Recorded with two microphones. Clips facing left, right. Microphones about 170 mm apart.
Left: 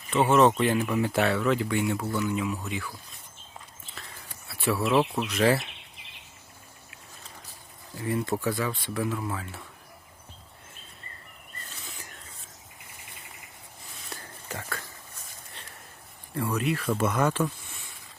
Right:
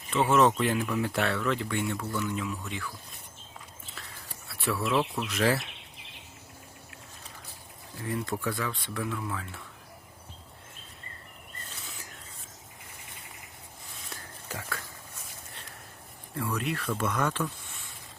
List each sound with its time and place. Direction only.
0.1 s speech: 5° left (ahead or behind)
4.4 s a sound: 5° left (ahead or behind)
4.9 s speech: 15° left (ahead or behind)
5.3 s speech: centre (ahead or behind)
8.0 s speech: 5° left (ahead or behind)
14.1 s a sound: centre (ahead or behind)
16.6 s speech: 5° left (ahead or behind)